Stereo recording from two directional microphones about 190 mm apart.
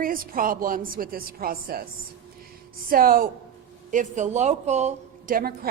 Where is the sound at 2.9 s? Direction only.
50° right (ahead or behind).